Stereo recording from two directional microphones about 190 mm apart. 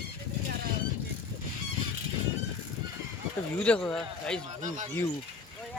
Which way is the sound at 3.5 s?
5° left (ahead or behind).